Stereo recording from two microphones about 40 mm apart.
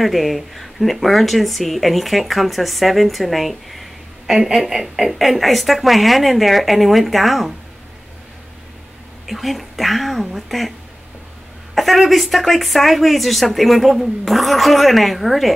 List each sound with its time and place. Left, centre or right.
0.0 s a woman's voice: centre
4.3 s a woman's voice: centre
9.3 s a woman's voice: centre
11.7 s a woman's voice: centre